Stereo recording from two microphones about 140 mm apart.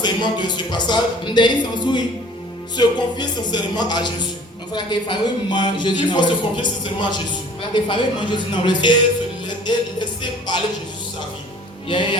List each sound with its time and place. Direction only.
0.0 s a man's voice: 30° left (ahead or behind)
9.6 s music: 30° left (ahead or behind)